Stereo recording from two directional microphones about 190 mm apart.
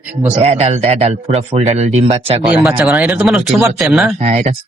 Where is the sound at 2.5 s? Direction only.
15° right (ahead or behind).